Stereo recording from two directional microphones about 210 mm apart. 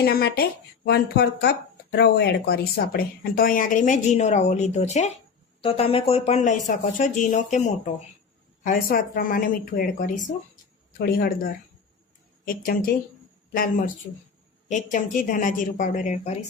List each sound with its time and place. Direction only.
0.0 s a woman's voice: 45° left (ahead or behind)
12.5 s a woman's voice: 45° left (ahead or behind)